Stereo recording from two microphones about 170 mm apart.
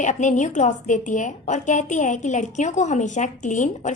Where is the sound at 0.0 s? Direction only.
45° left (ahead or behind).